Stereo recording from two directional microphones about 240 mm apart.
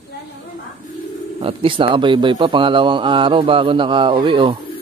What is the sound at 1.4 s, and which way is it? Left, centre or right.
Speech, right.